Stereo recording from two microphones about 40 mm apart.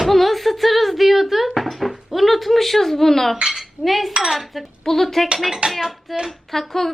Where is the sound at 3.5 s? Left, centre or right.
Centre.